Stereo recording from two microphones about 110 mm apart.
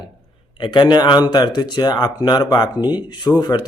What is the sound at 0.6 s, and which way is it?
Speech, 45° left (ahead or behind).